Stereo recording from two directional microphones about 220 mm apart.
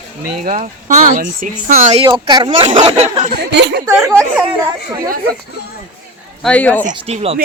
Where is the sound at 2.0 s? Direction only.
20° right (ahead or behind).